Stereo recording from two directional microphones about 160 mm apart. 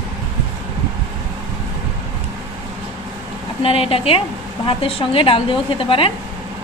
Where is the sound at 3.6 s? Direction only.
35° left (ahead or behind).